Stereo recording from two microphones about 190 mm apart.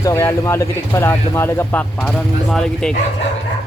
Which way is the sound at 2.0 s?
Centre (ahead or behind).